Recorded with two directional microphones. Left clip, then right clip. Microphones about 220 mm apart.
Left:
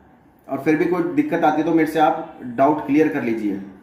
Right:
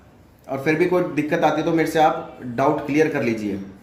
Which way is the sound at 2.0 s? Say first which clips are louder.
Even; 35° right (ahead or behind).